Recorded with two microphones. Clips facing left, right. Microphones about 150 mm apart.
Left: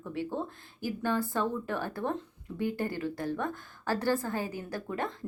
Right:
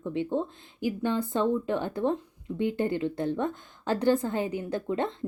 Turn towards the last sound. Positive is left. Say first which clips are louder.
# right 6 dB
turn(degrees=-25)  # may be behind; listen again after turning